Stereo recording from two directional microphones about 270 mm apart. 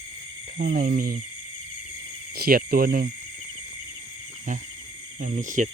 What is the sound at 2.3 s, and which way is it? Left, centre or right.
Speech, right.